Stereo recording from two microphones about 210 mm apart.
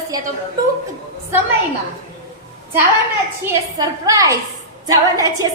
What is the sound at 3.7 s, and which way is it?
A woman's voice, 15° right (ahead or behind).